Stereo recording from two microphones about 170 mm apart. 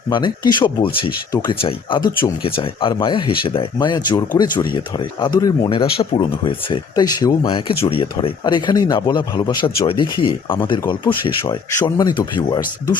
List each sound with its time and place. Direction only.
0.1 s speech: 25° left (ahead or behind)
7.4 s speech: 35° left (ahead or behind)